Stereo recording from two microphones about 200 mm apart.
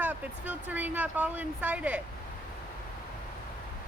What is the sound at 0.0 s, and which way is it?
Speech, 10° right (ahead or behind).